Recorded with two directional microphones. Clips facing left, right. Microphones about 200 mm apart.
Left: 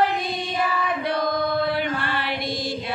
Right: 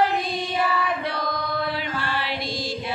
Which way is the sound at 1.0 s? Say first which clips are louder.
Left 5 dB; 55° left (ahead or behind).